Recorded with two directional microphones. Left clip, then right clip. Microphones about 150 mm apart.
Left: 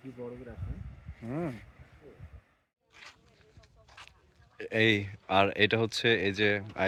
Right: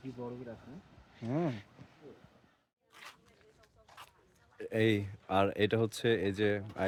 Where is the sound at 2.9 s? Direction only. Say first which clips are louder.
Left 1 dB; 10° right (ahead or behind).